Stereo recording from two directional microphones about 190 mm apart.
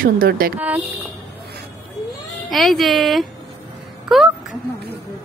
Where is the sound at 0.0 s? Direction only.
50° right (ahead or behind).